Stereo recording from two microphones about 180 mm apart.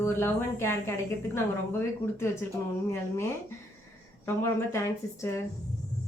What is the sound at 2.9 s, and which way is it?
A woman's voice, 15° left (ahead or behind).